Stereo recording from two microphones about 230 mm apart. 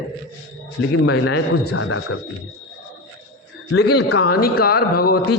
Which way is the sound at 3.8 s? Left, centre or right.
Left.